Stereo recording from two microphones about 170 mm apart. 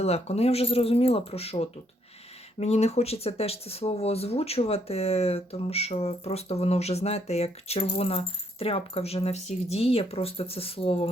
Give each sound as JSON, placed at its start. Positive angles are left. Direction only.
{"t": 0.0, "sound": "speech", "side_deg": 40}